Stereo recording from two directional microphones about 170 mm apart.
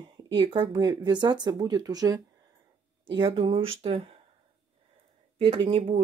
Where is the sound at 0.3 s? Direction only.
30° right (ahead or behind).